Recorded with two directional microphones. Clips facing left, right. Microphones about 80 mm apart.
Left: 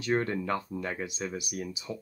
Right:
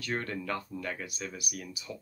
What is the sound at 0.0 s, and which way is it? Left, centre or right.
Speech, left.